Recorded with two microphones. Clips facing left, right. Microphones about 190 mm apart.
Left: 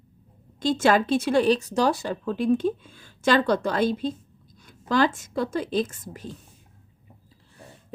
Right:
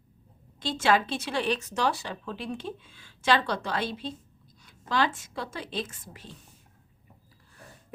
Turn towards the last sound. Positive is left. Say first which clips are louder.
# left 8 dB
turn(degrees=45)  # may be behind; listen again after turning